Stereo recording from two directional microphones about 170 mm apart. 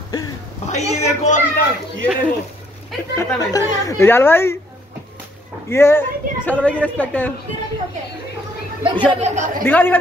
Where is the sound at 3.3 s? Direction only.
20° left (ahead or behind).